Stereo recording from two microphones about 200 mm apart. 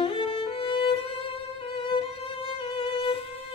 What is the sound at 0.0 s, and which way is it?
Music, 25° left (ahead or behind).